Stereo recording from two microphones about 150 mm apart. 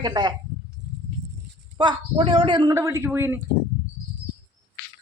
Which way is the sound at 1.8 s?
35° right (ahead or behind).